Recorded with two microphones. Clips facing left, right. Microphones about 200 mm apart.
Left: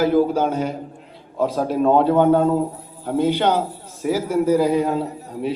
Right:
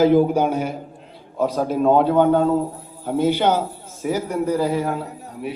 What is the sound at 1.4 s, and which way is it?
A man's voice, centre (ahead or behind).